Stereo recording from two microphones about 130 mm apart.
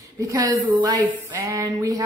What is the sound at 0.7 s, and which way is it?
A woman's voice, 35° right (ahead or behind).